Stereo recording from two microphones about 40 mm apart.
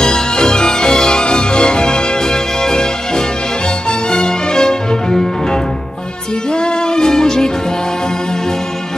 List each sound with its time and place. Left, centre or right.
0.0 s music: centre